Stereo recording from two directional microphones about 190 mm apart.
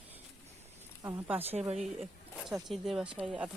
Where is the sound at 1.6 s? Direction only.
35° right (ahead or behind).